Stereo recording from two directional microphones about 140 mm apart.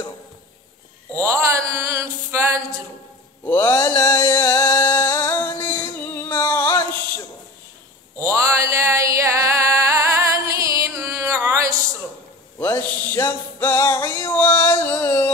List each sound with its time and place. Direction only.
1.1 s mantra: 20° right (ahead or behind)
3.4 s mantra: 20° left (ahead or behind)
5.0 s music: 20° left (ahead or behind)
6.1 s a sound: 15° left (ahead or behind)
8.2 s a sound: 20° right (ahead or behind)
12.5 s music: 15° left (ahead or behind)